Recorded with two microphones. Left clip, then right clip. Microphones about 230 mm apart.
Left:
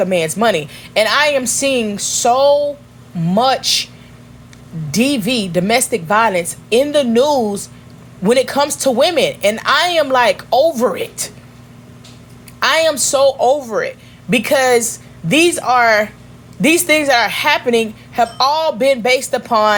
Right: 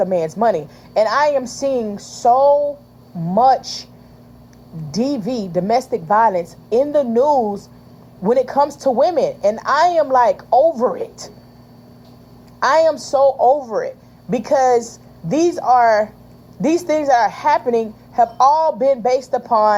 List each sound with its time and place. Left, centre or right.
0.0 s a woman's voice: left
4.9 s a woman's voice: left
12.5 s a woman's voice: left